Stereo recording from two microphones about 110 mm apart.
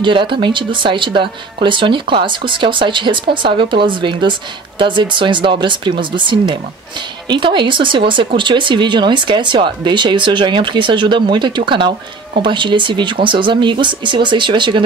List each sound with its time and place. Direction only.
0.0 s speech: 45° right (ahead or behind)